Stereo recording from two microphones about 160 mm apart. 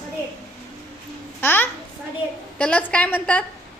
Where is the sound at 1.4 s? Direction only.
15° left (ahead or behind).